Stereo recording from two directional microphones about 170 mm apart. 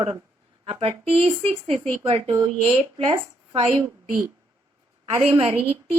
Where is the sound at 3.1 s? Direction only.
35° right (ahead or behind).